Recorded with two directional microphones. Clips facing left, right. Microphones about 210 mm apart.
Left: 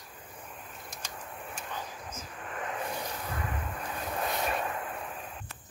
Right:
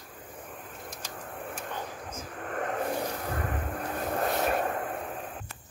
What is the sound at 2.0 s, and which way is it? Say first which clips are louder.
Vehicle: right 4 dB; 50° right (ahead or behind).